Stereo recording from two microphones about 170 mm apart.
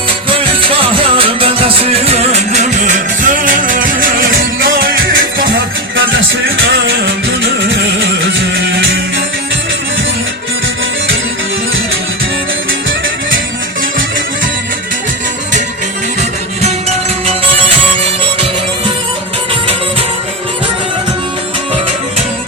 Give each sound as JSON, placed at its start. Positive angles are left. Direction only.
{"t": 0.3, "sound": "music", "side_deg": -30}